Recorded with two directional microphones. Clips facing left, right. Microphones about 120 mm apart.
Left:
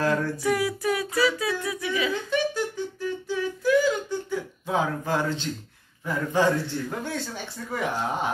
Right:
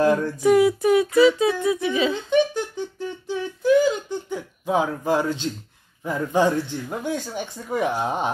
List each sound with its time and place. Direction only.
0.0 s humming: 20° right (ahead or behind)
6.0 s speech: 15° right (ahead or behind)